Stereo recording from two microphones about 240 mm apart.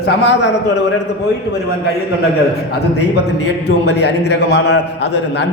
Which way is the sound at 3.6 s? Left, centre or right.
Left.